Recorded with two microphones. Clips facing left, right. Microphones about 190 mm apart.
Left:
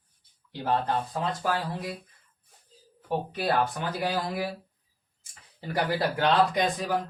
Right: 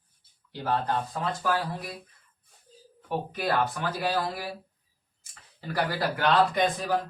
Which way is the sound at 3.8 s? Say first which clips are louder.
Even; 20° left (ahead or behind).